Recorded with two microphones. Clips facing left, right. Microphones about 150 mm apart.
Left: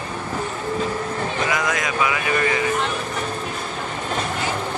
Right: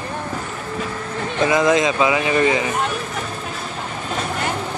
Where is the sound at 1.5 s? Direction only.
25° right (ahead or behind).